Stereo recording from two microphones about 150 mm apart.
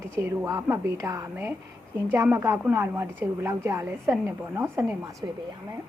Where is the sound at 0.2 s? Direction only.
20° right (ahead or behind).